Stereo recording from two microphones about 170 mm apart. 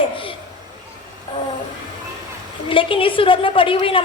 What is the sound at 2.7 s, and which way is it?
A woman's voice, 30° left (ahead or behind).